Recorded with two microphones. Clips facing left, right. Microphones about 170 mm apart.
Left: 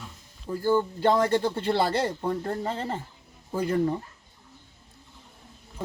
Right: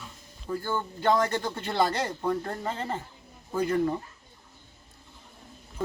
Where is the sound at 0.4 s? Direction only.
30° left (ahead or behind).